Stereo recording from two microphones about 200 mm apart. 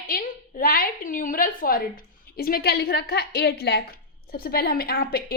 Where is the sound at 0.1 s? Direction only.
45° left (ahead or behind).